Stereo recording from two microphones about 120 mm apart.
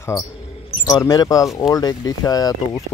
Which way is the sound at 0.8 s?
30° left (ahead or behind).